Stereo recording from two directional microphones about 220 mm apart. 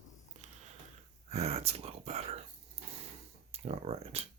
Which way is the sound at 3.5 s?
25° right (ahead or behind).